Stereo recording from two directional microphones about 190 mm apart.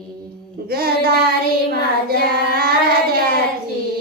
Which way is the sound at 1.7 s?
55° right (ahead or behind).